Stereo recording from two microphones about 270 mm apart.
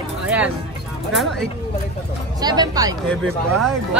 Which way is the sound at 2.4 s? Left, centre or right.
Centre.